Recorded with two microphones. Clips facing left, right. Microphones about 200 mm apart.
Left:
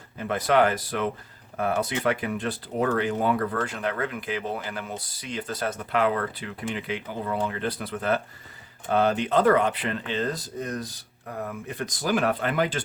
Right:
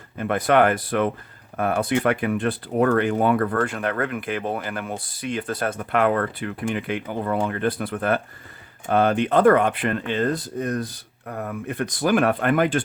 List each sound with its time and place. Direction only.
0.2 s speech: 55° right (ahead or behind)